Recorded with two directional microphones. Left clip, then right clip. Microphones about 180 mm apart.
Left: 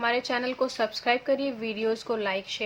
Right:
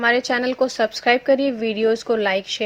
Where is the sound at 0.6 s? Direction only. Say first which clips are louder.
Right 8 dB; 25° right (ahead or behind).